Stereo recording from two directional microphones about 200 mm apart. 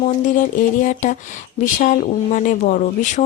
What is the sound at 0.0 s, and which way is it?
Speech, 40° left (ahead or behind).